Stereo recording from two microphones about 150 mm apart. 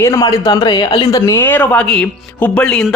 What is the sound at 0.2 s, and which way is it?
Speech, 25° left (ahead or behind).